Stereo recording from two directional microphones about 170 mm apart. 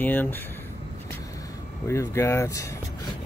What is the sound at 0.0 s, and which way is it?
Speech, 10° left (ahead or behind).